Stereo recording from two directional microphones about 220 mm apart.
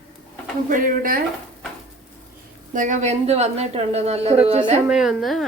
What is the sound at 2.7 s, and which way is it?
A woman's voice, 35° right (ahead or behind).